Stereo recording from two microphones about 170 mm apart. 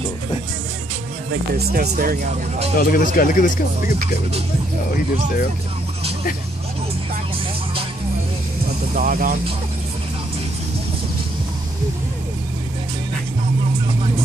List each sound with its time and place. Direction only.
1.3 s speech: 65° right (ahead or behind)
2.8 s speech: 55° left (ahead or behind)
8.9 s speech: 55° right (ahead or behind)